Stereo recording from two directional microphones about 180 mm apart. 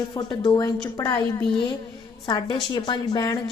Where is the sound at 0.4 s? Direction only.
20° left (ahead or behind).